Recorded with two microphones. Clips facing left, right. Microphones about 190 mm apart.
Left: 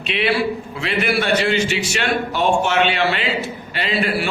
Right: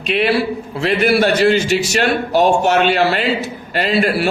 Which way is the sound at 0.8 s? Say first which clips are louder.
Right 7 dB; 40° right (ahead or behind).